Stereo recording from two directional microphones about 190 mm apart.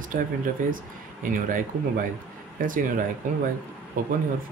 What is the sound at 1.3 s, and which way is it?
Speech, 45° right (ahead or behind).